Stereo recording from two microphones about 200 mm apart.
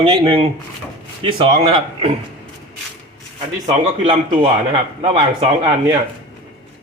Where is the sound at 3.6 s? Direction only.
25° right (ahead or behind).